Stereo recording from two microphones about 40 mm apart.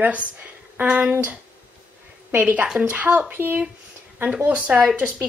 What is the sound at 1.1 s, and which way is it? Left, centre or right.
Speech, right.